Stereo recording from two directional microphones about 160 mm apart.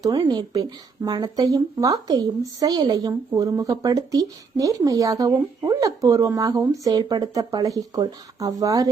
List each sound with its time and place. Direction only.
0.0 s a woman's voice: 25° right (ahead or behind)